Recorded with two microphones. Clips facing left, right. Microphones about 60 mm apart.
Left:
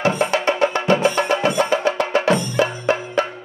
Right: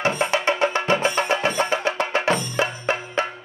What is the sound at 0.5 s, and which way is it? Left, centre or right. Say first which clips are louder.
Music: left 3 dB; right.